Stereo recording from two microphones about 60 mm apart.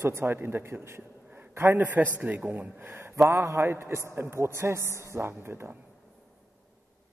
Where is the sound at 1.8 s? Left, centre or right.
Right.